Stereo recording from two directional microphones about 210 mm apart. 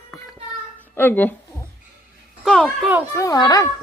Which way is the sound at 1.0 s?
10° left (ahead or behind).